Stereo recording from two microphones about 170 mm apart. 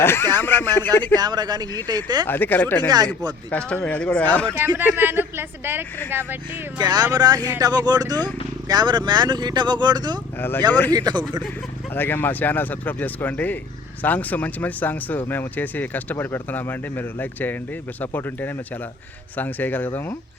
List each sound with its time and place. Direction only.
0.0 s speech: 15° left (ahead or behind)
1.0 s speech: 25° right (ahead or behind)
2.2 s speech: 10° left (ahead or behind)
4.5 s speech: 10° right (ahead or behind)
6.7 s speech: 25° right (ahead or behind)
11.9 s speech: 10° left (ahead or behind)